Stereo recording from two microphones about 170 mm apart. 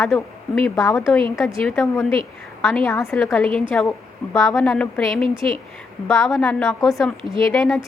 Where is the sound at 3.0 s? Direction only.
15° left (ahead or behind).